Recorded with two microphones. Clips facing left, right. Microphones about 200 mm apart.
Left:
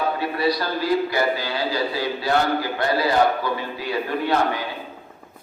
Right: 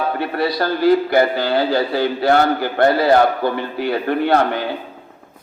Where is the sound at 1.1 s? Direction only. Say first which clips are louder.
Right 7 dB; 60° right (ahead or behind).